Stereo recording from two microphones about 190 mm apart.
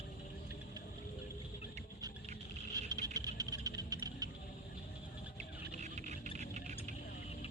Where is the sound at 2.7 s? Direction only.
20° right (ahead or behind).